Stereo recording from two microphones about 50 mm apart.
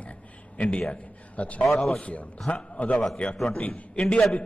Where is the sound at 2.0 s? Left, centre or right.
Left.